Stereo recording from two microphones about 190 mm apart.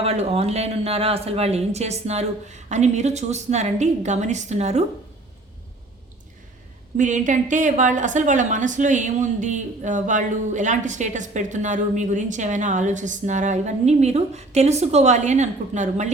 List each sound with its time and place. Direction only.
0.0 s a woman's voice: 30° right (ahead or behind)
6.9 s a woman's voice: 40° right (ahead or behind)